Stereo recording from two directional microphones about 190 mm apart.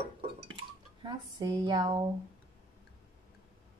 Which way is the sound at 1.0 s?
20° right (ahead or behind).